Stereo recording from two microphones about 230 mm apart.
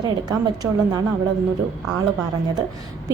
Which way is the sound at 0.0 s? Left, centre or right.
Centre.